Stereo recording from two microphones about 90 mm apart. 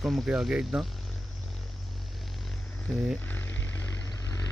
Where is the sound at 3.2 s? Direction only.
20° left (ahead or behind).